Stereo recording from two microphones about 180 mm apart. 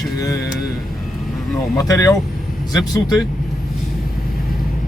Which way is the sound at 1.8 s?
20° left (ahead or behind).